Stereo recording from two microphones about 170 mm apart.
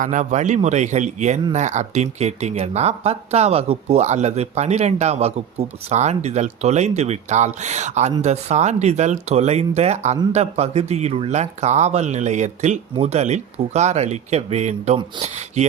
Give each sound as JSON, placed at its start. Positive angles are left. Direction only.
{"t": 0.0, "sound": "a man's voice", "side_deg": -45}